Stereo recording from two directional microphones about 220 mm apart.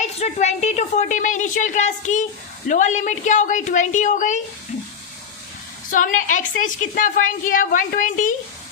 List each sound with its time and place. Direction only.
0.0 s a woman's voice: 30° left (ahead or behind)
5.9 s a woman's voice: 35° left (ahead or behind)